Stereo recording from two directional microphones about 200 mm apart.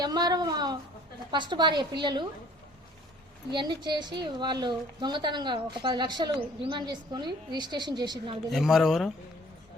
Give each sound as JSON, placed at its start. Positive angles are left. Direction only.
{"t": 0.0, "sound": "a woman's voice", "side_deg": -20}
{"t": 3.5, "sound": "a woman's voice", "side_deg": -20}
{"t": 8.4, "sound": "speech", "side_deg": 0}